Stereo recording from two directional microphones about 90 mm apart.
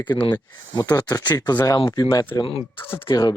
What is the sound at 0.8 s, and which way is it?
Speech, 45° left (ahead or behind).